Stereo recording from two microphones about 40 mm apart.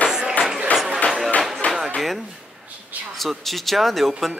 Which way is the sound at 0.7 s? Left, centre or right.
Left.